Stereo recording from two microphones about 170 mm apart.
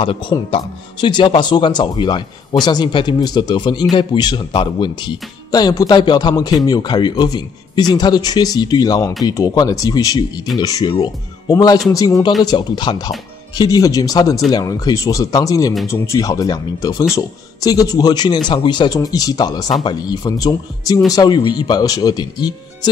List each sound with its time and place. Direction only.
0.0 s speech: 30° left (ahead or behind)